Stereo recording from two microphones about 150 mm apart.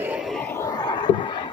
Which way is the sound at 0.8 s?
30° left (ahead or behind).